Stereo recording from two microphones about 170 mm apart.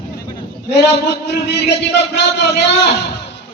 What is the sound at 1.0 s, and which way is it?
A man's voice, 80° left.